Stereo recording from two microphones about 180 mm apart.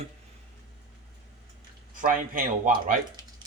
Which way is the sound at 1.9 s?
50° right (ahead or behind).